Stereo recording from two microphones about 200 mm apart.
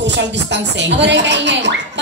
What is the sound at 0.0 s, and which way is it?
Speech, 60° right (ahead or behind).